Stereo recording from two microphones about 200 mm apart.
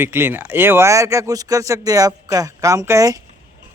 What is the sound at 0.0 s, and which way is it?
Speech, 10° right (ahead or behind).